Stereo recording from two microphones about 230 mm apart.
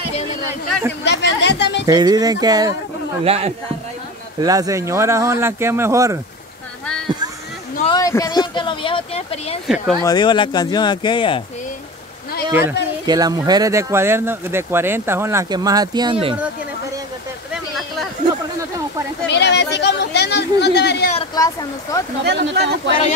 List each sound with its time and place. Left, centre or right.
1.0 s a sound: left
1.9 s a man's voice: centre
4.4 s speech: centre
7.9 s speech: centre
12.4 s speech: centre
17.5 s a sound: centre
19.2 s a sound: left
21.4 s speech: centre
22.2 s speech: right